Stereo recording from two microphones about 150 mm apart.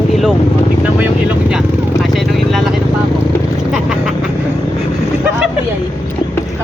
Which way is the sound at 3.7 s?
Centre (ahead or behind).